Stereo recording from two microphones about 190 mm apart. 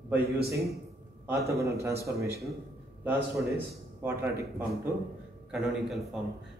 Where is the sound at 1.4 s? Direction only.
15° right (ahead or behind).